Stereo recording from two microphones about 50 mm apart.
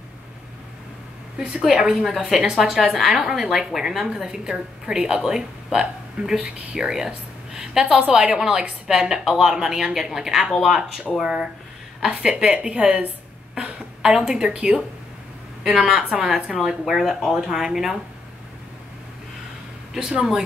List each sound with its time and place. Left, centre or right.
1.6 s a woman's voice: centre
14.0 s a woman's voice: centre
19.9 s a woman's voice: centre